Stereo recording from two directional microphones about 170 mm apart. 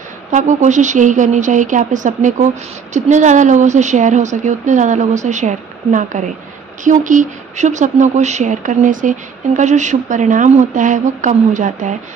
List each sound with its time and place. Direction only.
0.3 s a woman's voice: 45° right (ahead or behind)